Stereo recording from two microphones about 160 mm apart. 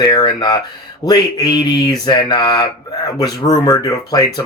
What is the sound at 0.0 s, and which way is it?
Speech, 25° left (ahead or behind).